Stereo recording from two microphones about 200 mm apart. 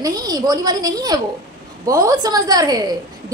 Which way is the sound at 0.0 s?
20° right (ahead or behind).